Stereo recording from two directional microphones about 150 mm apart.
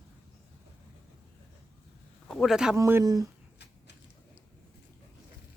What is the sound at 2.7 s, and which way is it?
Speech, 15° right (ahead or behind).